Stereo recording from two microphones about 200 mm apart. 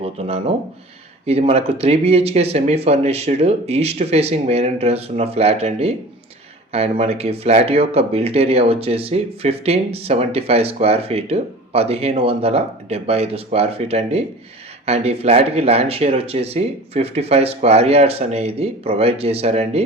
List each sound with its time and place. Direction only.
0.0 s speech: 30° right (ahead or behind)